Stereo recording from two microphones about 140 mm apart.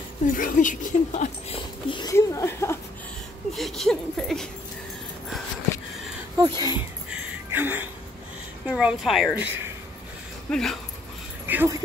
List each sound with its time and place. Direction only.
0.3 s speech: 70° left (ahead or behind)
1.1 s speech: 45° left (ahead or behind)
2.0 s speech: 25° left (ahead or behind)
3.5 s a sound: centre (ahead or behind)
6.3 s speech: 30° right (ahead or behind)
7.1 s music: 10° right (ahead or behind)
8.6 s a sound: 5° right (ahead or behind)
9.3 s a woman's voice: 15° right (ahead or behind)
10.5 s a sound: centre (ahead or behind)
11.4 s speech: 15° right (ahead or behind)